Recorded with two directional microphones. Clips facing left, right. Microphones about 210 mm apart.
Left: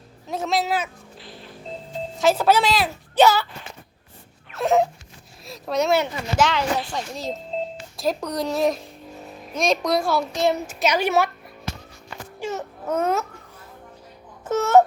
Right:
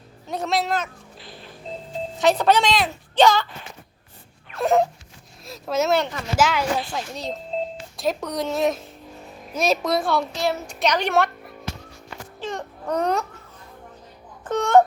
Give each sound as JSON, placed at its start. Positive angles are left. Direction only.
{"t": 0.3, "sound": "a sound", "side_deg": 0}
{"t": 2.1, "sound": "a child's voice", "side_deg": 0}
{"t": 4.5, "sound": "a sound", "side_deg": 0}
{"t": 6.3, "sound": "speech", "side_deg": -5}
{"t": 10.3, "sound": "a child's voice", "side_deg": 20}
{"t": 10.7, "sound": "speech", "side_deg": 5}
{"t": 12.4, "sound": "baby cry", "side_deg": 5}
{"t": 14.4, "sound": "babbling", "side_deg": 5}